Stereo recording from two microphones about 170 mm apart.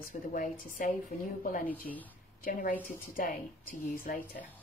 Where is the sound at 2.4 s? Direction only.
50° left (ahead or behind).